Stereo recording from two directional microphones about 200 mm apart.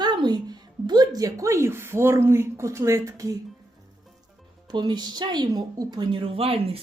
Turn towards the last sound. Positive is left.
turn(degrees=-30)  # may be behind; listen again after turning